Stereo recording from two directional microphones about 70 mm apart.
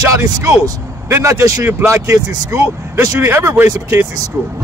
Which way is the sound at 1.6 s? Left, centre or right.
Right.